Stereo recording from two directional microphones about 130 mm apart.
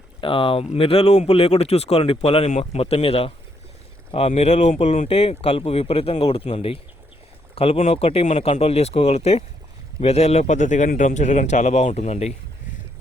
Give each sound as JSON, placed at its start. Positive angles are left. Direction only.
{"t": 0.2, "sound": "speech", "side_deg": 40}
{"t": 4.3, "sound": "a man's voice", "side_deg": 60}